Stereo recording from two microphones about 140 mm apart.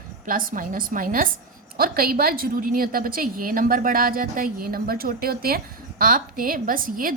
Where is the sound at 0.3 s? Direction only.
85° right.